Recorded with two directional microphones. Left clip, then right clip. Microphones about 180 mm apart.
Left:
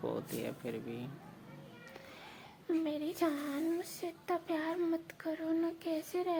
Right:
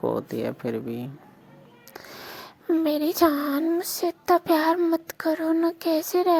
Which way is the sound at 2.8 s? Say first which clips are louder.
Right 18 dB; 55° right (ahead or behind).